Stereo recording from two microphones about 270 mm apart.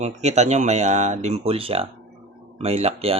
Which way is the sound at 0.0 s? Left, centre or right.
Right.